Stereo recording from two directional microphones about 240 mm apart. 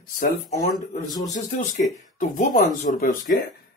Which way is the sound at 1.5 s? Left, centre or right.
Left.